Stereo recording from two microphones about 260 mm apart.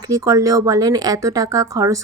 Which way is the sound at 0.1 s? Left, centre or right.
Centre.